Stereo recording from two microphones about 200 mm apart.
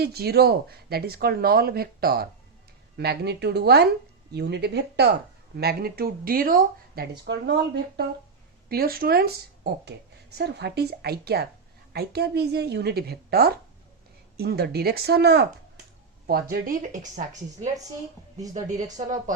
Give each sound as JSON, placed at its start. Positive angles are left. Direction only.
{"t": 0.0, "sound": "a woman's voice", "side_deg": -50}